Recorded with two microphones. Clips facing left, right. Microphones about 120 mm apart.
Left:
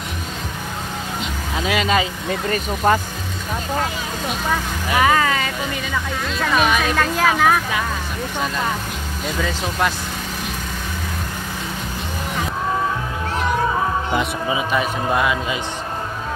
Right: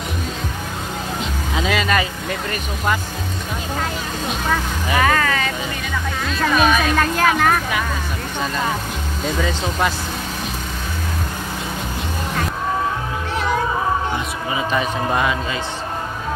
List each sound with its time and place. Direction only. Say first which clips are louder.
1.6 s vehicle: even; 10° left (ahead or behind)
2.5 s speech: left 6 dB; 35° left (ahead or behind)
4.5 s speech: right 1 dB; 10° left (ahead or behind)
6.2 s speech: right 2 dB; centre (ahead or behind)
14.7 s speech: right 2 dB; 5° left (ahead or behind)